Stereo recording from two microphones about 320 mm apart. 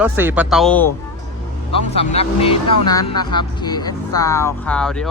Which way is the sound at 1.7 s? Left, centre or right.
Centre.